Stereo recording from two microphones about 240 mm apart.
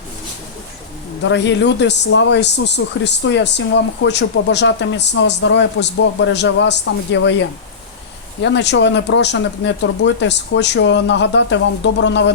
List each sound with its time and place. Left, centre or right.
1.2 s speech: left